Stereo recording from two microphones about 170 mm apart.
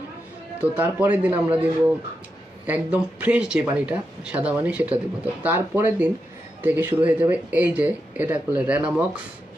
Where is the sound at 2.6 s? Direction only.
10° right (ahead or behind).